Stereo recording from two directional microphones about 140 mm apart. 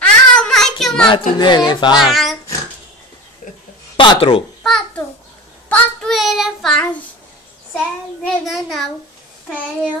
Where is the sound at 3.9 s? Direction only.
40° left (ahead or behind).